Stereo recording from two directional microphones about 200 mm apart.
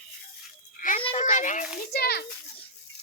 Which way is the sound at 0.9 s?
25° left (ahead or behind).